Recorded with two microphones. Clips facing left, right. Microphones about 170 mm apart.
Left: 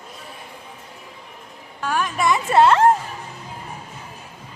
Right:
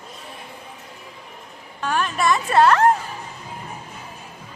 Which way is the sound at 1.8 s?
10° left (ahead or behind).